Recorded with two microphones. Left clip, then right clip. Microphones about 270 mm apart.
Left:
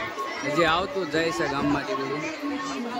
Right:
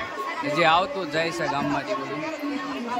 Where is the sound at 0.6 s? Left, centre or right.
Centre.